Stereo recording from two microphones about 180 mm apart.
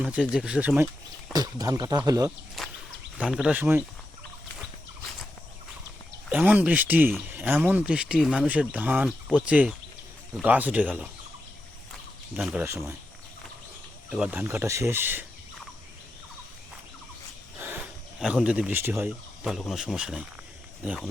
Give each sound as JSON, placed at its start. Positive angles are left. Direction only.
{"t": 0.0, "sound": "speech", "side_deg": -5}
{"t": 1.3, "sound": "speech", "side_deg": -20}
{"t": 2.6, "sound": "a sound", "side_deg": 0}
{"t": 3.2, "sound": "speech", "side_deg": -5}
{"t": 6.3, "sound": "speech", "side_deg": -10}
{"t": 12.4, "sound": "speech", "side_deg": 0}
{"t": 14.2, "sound": "speech", "side_deg": -10}
{"t": 17.6, "sound": "speech", "side_deg": -10}